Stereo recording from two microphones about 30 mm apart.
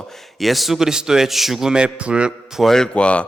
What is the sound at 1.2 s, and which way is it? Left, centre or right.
Speech, centre.